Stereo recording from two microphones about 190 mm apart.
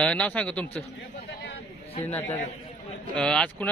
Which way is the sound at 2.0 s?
10° left (ahead or behind).